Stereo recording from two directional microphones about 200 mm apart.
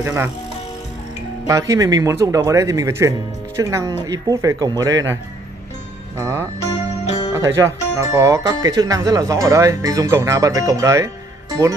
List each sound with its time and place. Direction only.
0.0 s speech: 15° right (ahead or behind)
1.5 s speech: 15° right (ahead or behind)
6.6 s music: 35° left (ahead or behind)
7.3 s speech: 15° right (ahead or behind)